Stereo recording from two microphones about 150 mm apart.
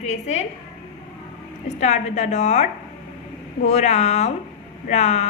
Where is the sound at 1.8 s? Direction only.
50° left (ahead or behind).